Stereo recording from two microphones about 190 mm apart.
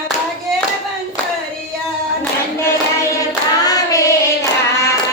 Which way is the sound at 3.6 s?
20° left (ahead or behind).